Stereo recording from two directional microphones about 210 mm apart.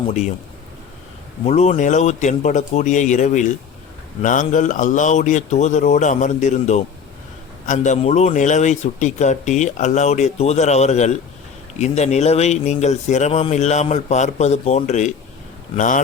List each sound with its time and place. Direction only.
1.5 s a man's voice: 30° left (ahead or behind)